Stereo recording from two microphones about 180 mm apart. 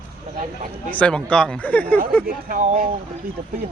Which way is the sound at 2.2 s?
45° right (ahead or behind).